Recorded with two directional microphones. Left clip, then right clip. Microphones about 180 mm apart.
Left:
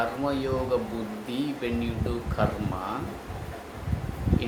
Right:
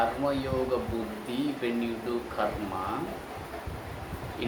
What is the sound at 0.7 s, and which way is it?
Speech, 20° left (ahead or behind).